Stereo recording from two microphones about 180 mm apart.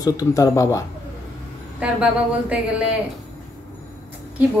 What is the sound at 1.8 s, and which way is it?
Speech, 5° right (ahead or behind).